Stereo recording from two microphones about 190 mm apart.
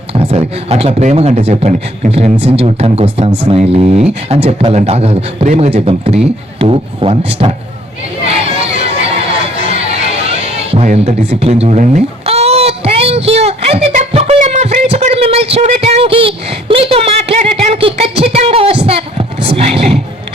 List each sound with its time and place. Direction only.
0.1 s a man's voice: 30° right (ahead or behind)
8.3 s chatter: 30° right (ahead or behind)